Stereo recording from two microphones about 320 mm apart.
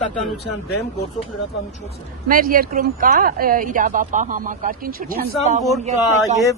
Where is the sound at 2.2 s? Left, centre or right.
Right.